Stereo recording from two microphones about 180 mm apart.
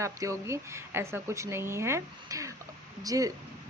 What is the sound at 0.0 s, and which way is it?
A woman's voice, 15° right (ahead or behind).